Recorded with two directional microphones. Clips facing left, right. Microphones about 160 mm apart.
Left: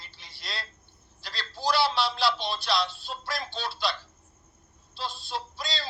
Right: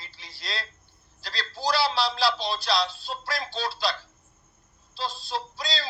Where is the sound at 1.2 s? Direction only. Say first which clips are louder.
Right 2 dB; 40° right (ahead or behind).